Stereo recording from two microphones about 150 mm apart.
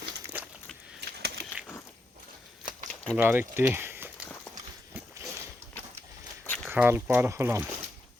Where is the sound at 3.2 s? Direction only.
15° right (ahead or behind).